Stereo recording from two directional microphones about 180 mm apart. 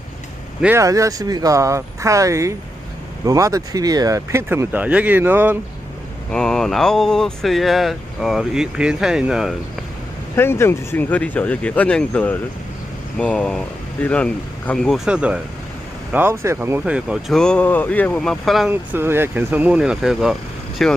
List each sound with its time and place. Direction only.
0.6 s speech: 15° right (ahead or behind)
6.3 s speech: 5° left (ahead or behind)
10.3 s speech: 15° left (ahead or behind)
18.7 s speech: 10° right (ahead or behind)